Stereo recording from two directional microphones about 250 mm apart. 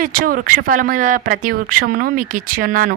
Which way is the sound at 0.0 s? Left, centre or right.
Right.